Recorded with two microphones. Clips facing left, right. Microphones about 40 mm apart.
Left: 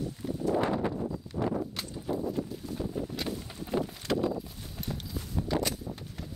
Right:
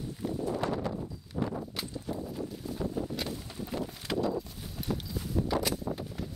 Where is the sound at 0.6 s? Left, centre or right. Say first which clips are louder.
Left 4 dB; left.